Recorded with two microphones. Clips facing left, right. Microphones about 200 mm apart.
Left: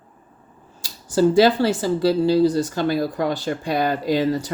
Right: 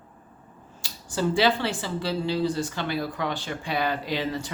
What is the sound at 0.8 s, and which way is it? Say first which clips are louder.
Speech: left 9 dB; 40° left (ahead or behind).